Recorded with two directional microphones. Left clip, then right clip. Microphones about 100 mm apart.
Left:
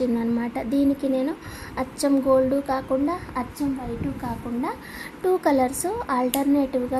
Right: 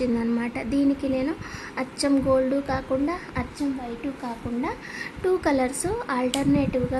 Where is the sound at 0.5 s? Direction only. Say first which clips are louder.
Left 2 dB; 15° left (ahead or behind).